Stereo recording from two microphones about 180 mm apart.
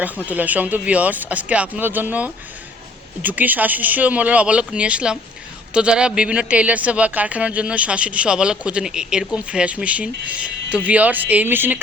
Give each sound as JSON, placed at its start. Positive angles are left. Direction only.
{"t": 0.3, "sound": "speech", "side_deg": -10}